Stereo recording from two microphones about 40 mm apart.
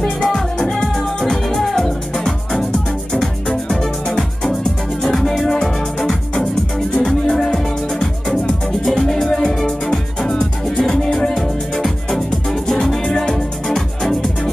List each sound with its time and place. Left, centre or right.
0.0 s music: centre
13.0 s music: left
13.7 s music: centre